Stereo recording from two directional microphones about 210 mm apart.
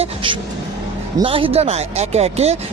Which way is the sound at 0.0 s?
25° right (ahead or behind).